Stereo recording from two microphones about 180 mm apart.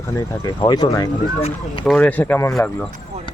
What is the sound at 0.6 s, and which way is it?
Speech, 25° left (ahead or behind).